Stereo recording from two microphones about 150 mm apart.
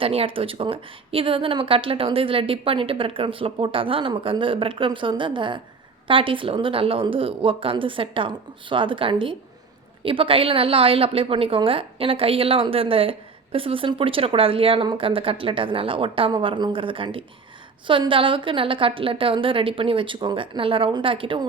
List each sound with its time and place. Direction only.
0.0 s a woman's voice: 40° right (ahead or behind)